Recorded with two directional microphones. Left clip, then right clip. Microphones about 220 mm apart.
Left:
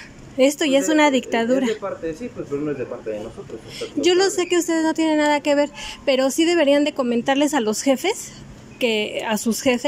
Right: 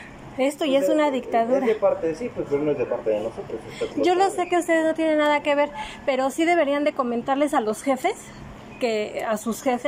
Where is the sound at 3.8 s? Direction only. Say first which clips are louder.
Left 2 dB; 45° left (ahead or behind).